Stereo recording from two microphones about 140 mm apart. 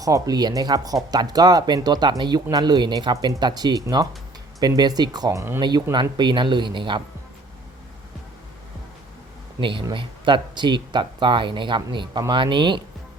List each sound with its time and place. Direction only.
0.0 s speech: 25° right (ahead or behind)
9.6 s speech: 35° right (ahead or behind)